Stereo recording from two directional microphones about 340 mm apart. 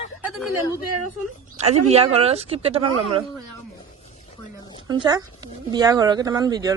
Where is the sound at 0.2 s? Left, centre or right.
Centre.